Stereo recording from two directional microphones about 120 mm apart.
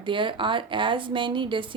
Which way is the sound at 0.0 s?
45° right (ahead or behind).